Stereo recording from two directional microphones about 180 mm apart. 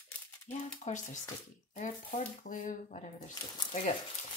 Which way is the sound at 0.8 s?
45° left (ahead or behind).